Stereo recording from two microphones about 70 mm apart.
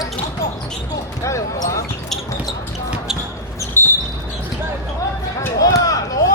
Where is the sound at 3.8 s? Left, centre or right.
Left.